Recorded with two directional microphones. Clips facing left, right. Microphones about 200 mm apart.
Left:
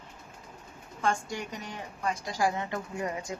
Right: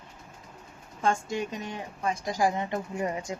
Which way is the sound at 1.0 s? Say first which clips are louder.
Right 3 dB; 20° right (ahead or behind).